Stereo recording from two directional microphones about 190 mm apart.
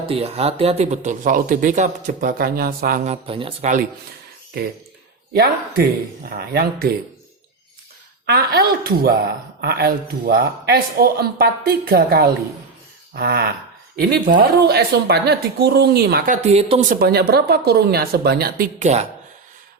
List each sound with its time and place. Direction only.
0.1 s speech: 30° right (ahead or behind)
5.3 s a man's voice: 50° right (ahead or behind)
8.3 s a woman's voice: 55° right (ahead or behind); by 16.8 s 35° right (ahead or behind)
16.9 s a woman's voice: 55° right (ahead or behind); by 19.0 s 35° right (ahead or behind)